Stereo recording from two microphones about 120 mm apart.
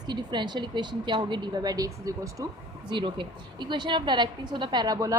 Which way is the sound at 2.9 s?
40° right (ahead or behind).